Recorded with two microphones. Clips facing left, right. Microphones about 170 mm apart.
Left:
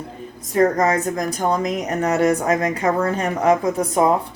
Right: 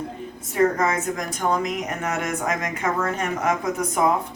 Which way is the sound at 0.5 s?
40° left (ahead or behind).